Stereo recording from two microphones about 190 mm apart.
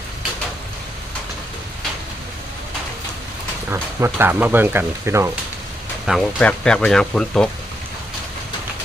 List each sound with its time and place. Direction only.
3.7 s speech: 10° right (ahead or behind)
6.1 s speech: centre (ahead or behind)